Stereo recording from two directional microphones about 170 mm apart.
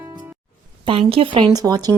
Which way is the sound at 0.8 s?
35° right (ahead or behind).